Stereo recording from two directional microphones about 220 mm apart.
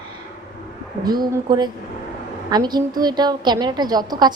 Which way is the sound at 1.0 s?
20° right (ahead or behind).